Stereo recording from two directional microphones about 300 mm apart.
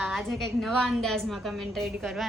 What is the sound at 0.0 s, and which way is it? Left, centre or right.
A woman's voice, centre.